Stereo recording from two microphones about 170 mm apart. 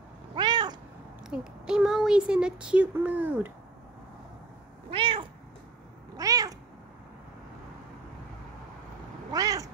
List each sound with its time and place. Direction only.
0.4 s cat: 25° right (ahead or behind)
1.3 s speech: 5° right (ahead or behind)
4.9 s cat: 30° right (ahead or behind)
9.3 s cat: 20° right (ahead or behind)